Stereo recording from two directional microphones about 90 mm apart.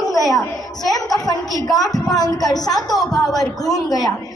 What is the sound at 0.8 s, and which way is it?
A woman's voice, 45° left (ahead or behind).